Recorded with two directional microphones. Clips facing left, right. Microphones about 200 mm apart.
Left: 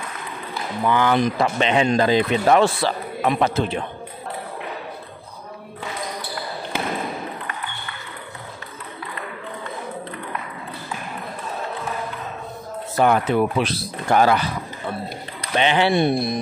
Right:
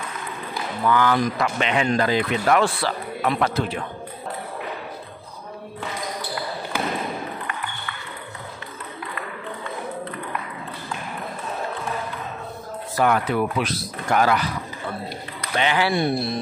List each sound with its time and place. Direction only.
0.8 s a man's voice: 20° left (ahead or behind)
12.9 s a man's voice: 25° left (ahead or behind)